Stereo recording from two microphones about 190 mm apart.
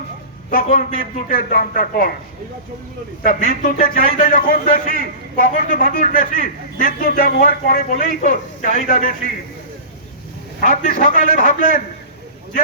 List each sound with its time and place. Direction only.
0.5 s a man's voice: 45° left (ahead or behind)
3.2 s a man's voice: 45° left (ahead or behind)
10.6 s a man's voice: 45° left (ahead or behind)